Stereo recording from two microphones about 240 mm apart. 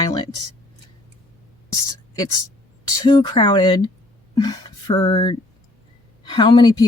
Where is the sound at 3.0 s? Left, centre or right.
Centre.